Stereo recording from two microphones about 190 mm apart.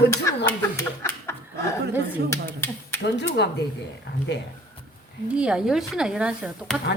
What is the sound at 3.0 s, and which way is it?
Speech, 65° left (ahead or behind).